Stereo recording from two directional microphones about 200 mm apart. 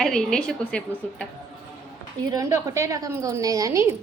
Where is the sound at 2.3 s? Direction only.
15° right (ahead or behind).